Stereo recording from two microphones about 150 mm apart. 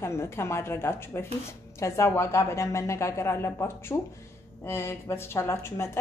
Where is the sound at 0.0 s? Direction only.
15° left (ahead or behind).